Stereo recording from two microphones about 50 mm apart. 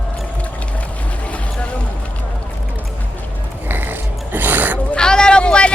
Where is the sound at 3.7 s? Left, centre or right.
Right.